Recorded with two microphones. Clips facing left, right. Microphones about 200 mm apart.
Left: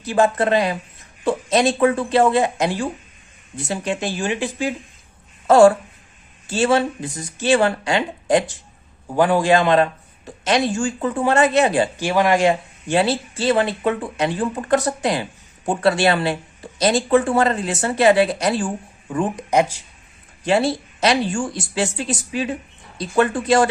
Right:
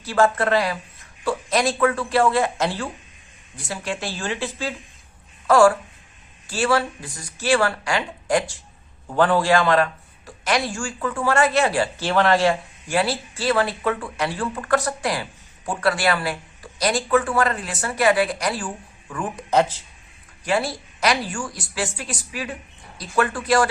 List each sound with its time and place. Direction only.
0.0 s a man's voice: 20° left (ahead or behind)
20.4 s a man's voice: 25° left (ahead or behind)